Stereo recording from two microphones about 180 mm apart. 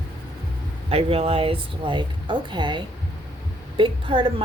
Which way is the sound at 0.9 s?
35° right (ahead or behind).